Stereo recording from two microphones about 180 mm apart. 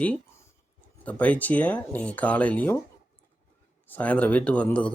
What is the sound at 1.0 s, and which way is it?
Speech, 10° left (ahead or behind).